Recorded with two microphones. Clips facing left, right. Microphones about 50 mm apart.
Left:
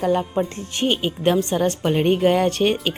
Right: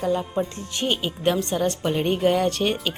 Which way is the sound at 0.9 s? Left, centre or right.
Left.